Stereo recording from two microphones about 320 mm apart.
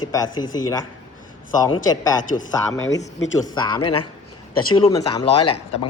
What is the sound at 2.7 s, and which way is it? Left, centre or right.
A woman's voice, centre.